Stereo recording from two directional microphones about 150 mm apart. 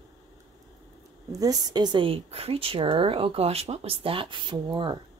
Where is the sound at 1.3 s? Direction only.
25° right (ahead or behind).